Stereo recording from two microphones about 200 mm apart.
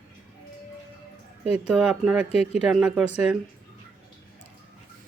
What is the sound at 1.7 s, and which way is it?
Speech, 5° right (ahead or behind).